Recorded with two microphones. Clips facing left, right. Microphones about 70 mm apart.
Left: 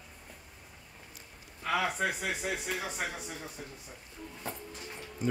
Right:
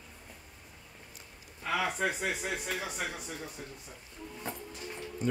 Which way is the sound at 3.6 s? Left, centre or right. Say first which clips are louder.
Even; centre.